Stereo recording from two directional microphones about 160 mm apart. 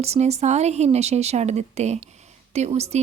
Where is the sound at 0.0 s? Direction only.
40° right (ahead or behind).